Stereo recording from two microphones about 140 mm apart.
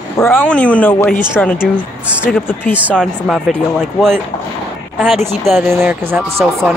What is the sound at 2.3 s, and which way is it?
Speech, 15° left (ahead or behind).